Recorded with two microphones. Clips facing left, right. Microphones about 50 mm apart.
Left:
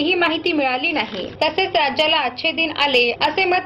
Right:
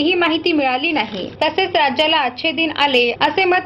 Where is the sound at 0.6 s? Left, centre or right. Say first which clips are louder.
Right 2 dB; right.